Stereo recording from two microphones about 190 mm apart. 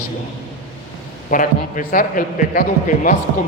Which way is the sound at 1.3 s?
45° left (ahead or behind).